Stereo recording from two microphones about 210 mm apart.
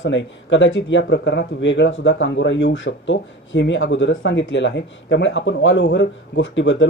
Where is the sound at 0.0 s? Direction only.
60° left (ahead or behind).